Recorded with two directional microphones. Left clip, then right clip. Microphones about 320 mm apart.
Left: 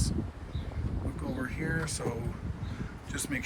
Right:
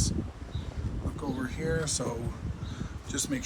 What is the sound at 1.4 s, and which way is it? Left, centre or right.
Speech, centre.